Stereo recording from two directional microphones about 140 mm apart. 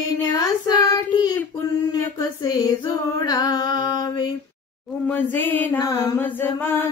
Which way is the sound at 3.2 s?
30° left (ahead or behind).